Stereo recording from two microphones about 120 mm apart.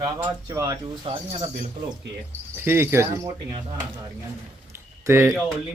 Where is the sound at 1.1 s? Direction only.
55° right (ahead or behind).